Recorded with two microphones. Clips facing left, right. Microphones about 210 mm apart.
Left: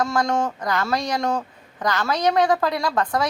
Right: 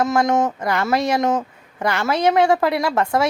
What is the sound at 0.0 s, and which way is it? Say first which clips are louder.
A woman's voice: right 4 dB; 20° right (ahead or behind).